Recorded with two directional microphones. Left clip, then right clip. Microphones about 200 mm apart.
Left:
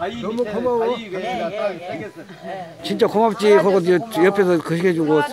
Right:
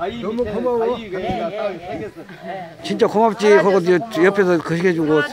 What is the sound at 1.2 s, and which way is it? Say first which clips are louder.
Speech: even; 25° left (ahead or behind).